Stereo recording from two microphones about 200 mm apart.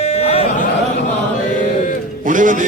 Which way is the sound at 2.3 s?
40° right (ahead or behind).